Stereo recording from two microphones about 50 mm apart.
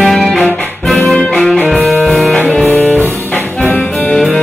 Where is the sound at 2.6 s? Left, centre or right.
Left.